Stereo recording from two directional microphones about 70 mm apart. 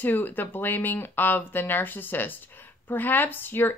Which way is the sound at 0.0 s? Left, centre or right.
Left.